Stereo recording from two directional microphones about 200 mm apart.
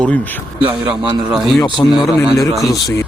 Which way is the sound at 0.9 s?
25° right (ahead or behind).